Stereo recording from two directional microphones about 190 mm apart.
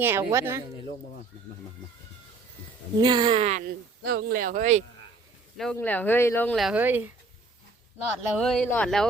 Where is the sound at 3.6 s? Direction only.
50° right (ahead or behind).